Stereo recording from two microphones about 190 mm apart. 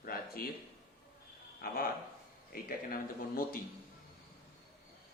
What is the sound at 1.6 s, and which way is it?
Speech, 50° left (ahead or behind).